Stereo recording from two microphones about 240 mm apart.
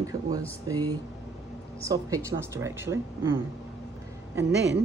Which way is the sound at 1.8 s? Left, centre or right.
Centre.